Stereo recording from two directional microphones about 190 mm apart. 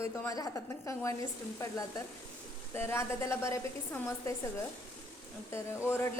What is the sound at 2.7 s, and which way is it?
Speech, 15° left (ahead or behind).